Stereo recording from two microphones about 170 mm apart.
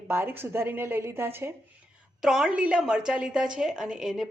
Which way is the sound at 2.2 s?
5° right (ahead or behind).